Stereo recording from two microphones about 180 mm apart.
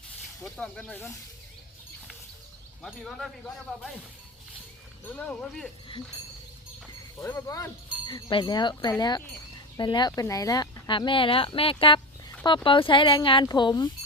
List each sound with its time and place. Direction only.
0.4 s speech: 5° left (ahead or behind)
2.8 s speech: centre (ahead or behind)
5.0 s speech: 10° left (ahead or behind)
7.2 s speech: 15° left (ahead or behind)